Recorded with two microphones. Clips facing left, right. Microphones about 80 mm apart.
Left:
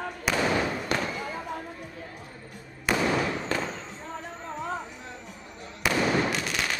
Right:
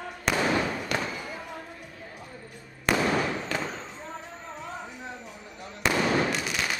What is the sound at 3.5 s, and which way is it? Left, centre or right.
Fireworks, left.